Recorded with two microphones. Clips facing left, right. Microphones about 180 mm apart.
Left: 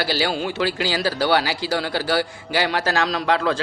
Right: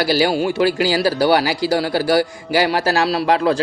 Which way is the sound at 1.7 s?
40° right (ahead or behind).